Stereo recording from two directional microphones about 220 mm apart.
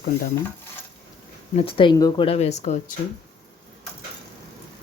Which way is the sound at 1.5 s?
25° left (ahead or behind).